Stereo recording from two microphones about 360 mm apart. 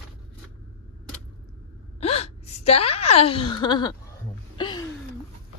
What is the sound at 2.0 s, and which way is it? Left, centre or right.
Gasp, centre.